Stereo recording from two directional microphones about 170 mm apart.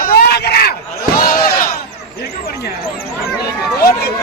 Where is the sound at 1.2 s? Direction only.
60° left (ahead or behind).